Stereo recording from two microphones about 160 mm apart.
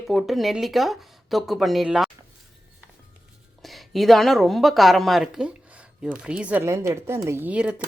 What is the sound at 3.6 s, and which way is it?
Speech, centre (ahead or behind).